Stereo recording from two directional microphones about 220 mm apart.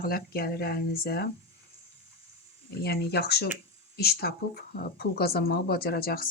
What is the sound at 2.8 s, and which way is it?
Speech, 45° left (ahead or behind).